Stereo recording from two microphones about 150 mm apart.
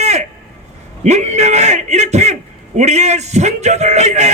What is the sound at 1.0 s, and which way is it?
A man's voice, 50° right (ahead or behind).